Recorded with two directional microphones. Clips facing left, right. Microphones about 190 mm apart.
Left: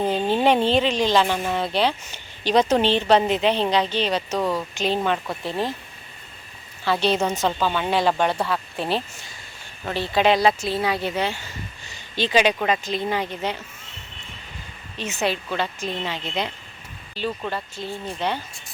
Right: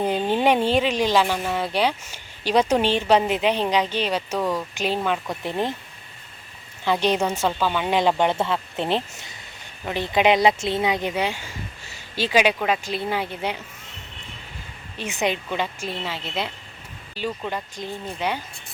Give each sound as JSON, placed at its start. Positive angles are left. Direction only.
{"t": 0.0, "sound": "speech", "side_deg": -15}
{"t": 4.4, "sound": "speech", "side_deg": 10}
{"t": 5.0, "sound": "speech", "side_deg": 0}
{"t": 5.4, "sound": "speech", "side_deg": -20}
{"t": 6.8, "sound": "speech", "side_deg": -15}
{"t": 14.9, "sound": "speech", "side_deg": -15}